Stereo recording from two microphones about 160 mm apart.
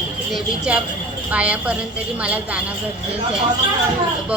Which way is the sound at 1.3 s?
10° right (ahead or behind).